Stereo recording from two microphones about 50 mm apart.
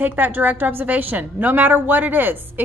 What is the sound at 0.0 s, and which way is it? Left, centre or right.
A woman's voice, right.